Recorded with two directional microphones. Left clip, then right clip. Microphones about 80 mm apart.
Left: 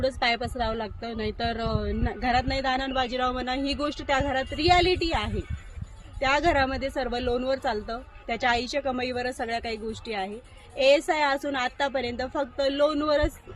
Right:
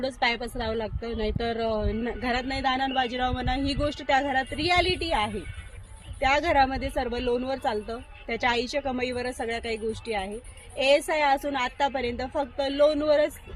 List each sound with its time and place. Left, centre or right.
0.2 s a woman's voice: left